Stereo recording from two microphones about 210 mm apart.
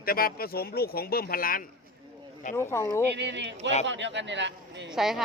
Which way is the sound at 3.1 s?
55° right (ahead or behind).